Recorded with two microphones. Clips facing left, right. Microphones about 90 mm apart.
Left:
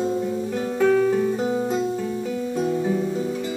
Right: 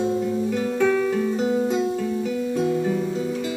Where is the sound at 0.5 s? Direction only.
15° left (ahead or behind).